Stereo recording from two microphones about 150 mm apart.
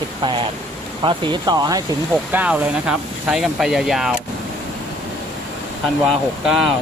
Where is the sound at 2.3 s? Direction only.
10° right (ahead or behind).